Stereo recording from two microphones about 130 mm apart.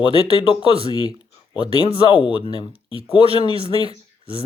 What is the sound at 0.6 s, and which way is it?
Speech, 45° right (ahead or behind).